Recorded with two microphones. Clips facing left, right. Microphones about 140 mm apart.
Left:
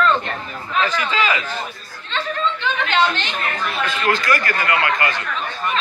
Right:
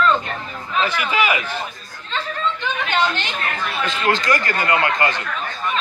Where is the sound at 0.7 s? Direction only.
10° right (ahead or behind).